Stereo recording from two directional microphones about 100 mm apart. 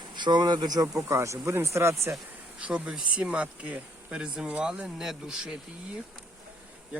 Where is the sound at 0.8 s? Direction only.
25° right (ahead or behind).